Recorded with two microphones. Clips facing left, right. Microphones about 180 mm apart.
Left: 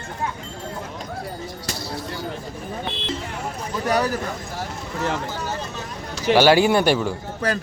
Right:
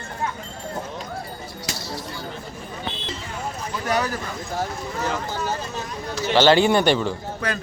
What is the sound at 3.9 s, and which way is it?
Speech, 35° left (ahead or behind).